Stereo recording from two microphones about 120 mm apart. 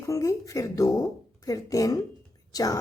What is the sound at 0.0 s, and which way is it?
A woman's voice, 25° left (ahead or behind).